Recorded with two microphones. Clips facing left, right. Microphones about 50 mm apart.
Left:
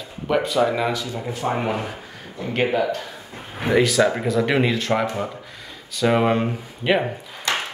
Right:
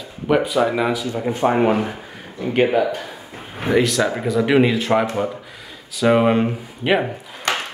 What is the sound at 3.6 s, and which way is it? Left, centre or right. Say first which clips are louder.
Speech: even; centre.